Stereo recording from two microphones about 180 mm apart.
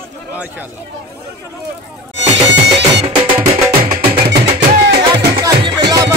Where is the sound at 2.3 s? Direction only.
75° right (ahead or behind).